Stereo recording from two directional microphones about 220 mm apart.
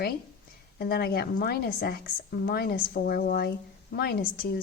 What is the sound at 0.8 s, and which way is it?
A woman's voice, 45° left (ahead or behind).